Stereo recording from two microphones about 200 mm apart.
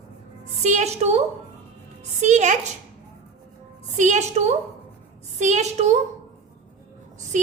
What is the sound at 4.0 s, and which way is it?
A woman's voice, 35° right (ahead or behind).